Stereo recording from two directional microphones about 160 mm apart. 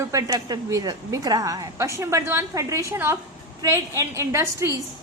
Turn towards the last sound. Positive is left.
turn(degrees=-20)  # may be behind; listen again after turning